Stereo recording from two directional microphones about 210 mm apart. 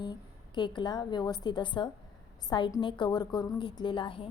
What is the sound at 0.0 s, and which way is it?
A woman's voice, 20° left (ahead or behind).